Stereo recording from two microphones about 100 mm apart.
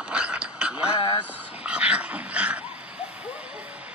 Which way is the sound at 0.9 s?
55° left (ahead or behind).